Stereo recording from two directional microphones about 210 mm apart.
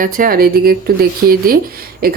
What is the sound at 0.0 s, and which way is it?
A woman's voice, 40° right (ahead or behind).